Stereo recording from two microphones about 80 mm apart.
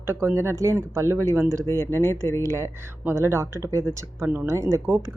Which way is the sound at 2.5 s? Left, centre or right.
Right.